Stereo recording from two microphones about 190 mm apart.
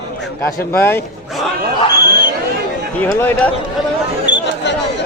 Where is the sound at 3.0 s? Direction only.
10° left (ahead or behind).